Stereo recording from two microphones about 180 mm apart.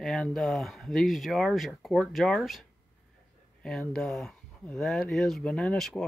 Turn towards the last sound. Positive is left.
turn(degrees=0)  # may be behind; listen again after turning